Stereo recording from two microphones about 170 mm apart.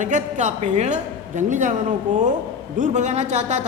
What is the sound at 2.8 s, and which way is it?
Speech, 45° right (ahead or behind).